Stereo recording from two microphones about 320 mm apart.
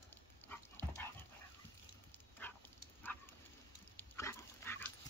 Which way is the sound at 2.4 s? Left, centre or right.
Centre.